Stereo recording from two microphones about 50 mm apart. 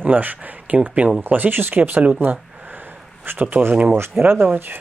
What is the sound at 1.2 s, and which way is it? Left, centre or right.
Speech, right.